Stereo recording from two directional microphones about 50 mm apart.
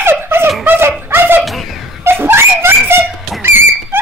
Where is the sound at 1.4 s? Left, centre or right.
Centre.